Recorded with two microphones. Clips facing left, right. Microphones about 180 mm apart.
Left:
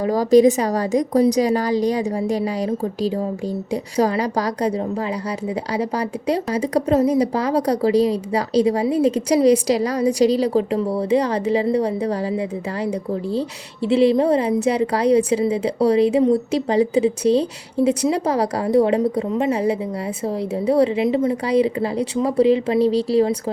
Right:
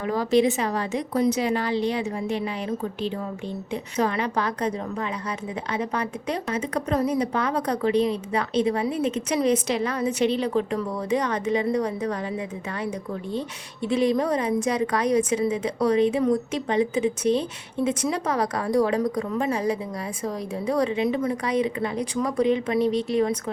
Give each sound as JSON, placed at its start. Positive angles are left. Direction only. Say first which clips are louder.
{"t": 0.0, "sound": "a woman's voice", "louder": "left 7 dB", "side_deg": 40}